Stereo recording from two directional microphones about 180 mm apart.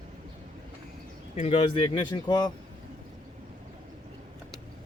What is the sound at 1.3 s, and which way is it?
Speech, 35° left (ahead or behind).